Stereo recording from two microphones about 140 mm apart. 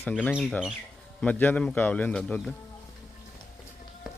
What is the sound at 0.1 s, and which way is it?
Speech, 10° left (ahead or behind).